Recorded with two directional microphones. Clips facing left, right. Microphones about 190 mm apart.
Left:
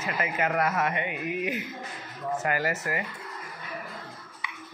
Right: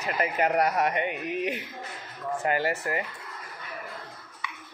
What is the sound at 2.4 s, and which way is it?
Speech, 30° right (ahead or behind).